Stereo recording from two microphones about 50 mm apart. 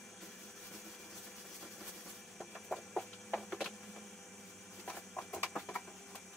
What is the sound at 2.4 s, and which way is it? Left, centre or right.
Chicken, centre.